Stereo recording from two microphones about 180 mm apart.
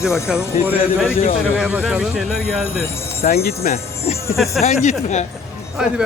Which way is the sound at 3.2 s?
55° left (ahead or behind).